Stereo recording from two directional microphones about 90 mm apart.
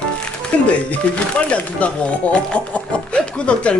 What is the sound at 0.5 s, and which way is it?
Speech, 15° left (ahead or behind).